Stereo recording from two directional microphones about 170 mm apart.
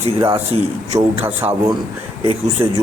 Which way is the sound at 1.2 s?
15° right (ahead or behind).